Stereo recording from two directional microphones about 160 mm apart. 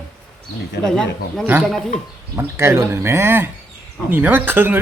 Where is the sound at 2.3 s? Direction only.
15° right (ahead or behind).